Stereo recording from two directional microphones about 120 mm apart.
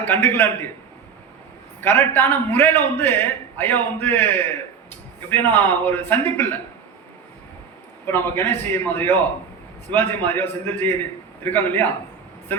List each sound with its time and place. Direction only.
0.0 s a man's voice: 20° left (ahead or behind)
1.8 s a man's voice: 20° left (ahead or behind)
8.0 s a man's voice: 20° left (ahead or behind)